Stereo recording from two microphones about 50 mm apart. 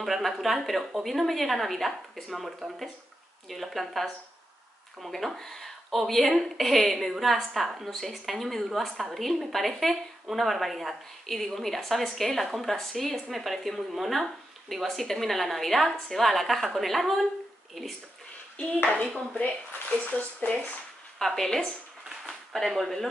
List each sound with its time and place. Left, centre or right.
0.0 s a woman's voice: centre
19.1 s speech: left
21.5 s speech: centre
22.2 s a sound: centre